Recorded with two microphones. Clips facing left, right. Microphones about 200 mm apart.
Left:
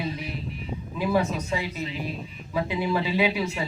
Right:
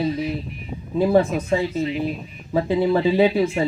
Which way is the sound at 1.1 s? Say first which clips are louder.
Right 6 dB; 50° right (ahead or behind).